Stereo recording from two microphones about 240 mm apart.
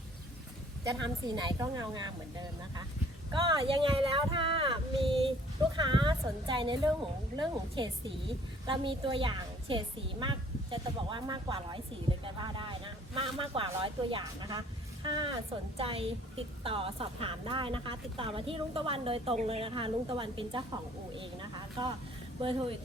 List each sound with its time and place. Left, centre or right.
0.9 s a woman's voice: centre